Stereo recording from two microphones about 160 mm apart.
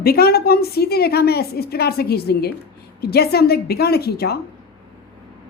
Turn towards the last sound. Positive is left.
turn(degrees=80)